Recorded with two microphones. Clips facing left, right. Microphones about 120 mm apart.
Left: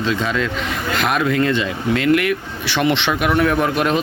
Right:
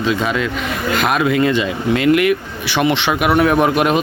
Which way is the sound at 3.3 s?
20° right (ahead or behind).